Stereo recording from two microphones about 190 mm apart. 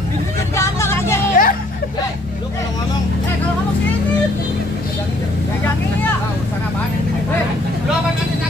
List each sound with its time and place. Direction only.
0.6 s vehicle: 15° left (ahead or behind)
1.3 s hubbub: 45° left (ahead or behind)